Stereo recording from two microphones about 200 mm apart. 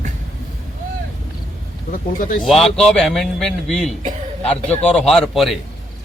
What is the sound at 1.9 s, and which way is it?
Speech, 40° left (ahead or behind).